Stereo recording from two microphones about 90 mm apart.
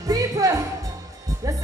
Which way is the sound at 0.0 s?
40° right (ahead or behind).